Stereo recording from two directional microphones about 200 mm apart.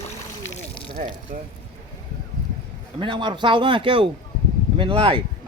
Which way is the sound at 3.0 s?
25° right (ahead or behind).